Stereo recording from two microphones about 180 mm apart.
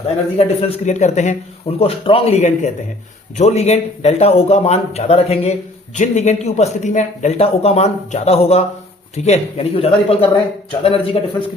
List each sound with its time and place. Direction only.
0.3 s speech: 35° left (ahead or behind)